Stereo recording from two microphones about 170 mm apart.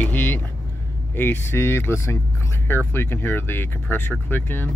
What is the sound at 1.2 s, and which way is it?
Speech, 15° left (ahead or behind).